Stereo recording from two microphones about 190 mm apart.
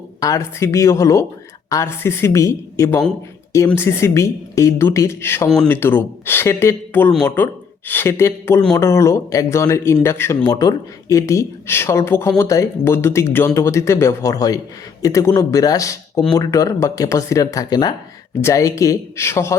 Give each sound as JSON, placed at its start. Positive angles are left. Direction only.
{"t": 0.2, "sound": "speech", "side_deg": 15}